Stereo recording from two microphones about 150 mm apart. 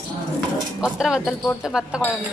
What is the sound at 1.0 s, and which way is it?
Speech, 5° right (ahead or behind).